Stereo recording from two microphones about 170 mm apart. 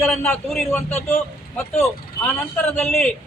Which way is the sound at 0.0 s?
10° left (ahead or behind).